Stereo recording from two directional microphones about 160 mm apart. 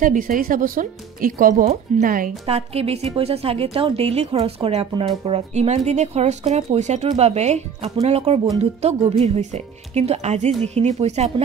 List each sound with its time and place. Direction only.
0.0 s speech: 60° right (ahead or behind)
2.4 s a woman's voice: 40° right (ahead or behind)